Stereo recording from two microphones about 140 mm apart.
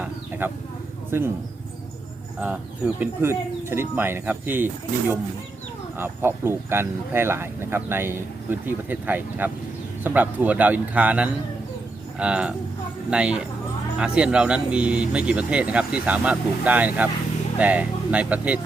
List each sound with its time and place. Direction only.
0.0 s a sound: 15° right (ahead or behind)
1.1 s speech: 15° right (ahead or behind)
2.4 s speech: 10° right (ahead or behind)